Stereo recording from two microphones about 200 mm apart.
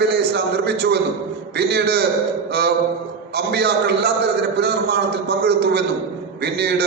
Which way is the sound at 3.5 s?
55° right (ahead or behind).